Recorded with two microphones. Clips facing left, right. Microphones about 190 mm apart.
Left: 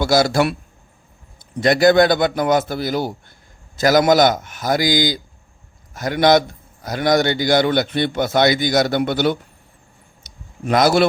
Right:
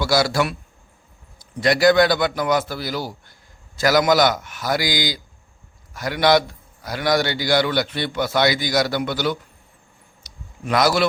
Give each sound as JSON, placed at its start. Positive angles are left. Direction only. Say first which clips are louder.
{"t": 0.0, "sound": "a man's voice", "louder": "left 4 dB", "side_deg": 50}
{"t": 1.6, "sound": "a man's voice", "louder": "left 2 dB", "side_deg": 50}
{"t": 10.8, "sound": "a man's voice", "louder": "left 4 dB", "side_deg": 50}